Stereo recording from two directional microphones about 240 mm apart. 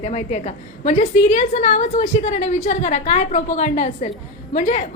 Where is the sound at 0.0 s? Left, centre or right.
Left.